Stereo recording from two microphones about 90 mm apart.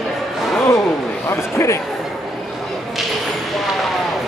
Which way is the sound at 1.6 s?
30° left (ahead or behind).